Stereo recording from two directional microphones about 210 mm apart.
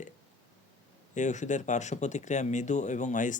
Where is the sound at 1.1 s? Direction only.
35° left (ahead or behind).